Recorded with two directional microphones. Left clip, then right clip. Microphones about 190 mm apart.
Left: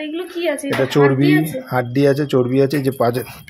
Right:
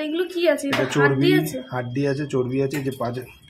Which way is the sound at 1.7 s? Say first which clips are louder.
Left 9 dB; 55° left (ahead or behind).